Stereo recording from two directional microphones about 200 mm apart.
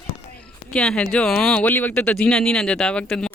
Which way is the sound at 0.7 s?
5° left (ahead or behind).